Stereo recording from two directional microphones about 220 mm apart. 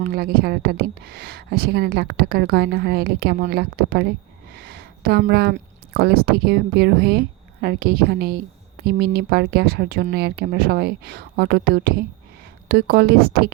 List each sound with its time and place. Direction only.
0.0 s speech: 45° right (ahead or behind)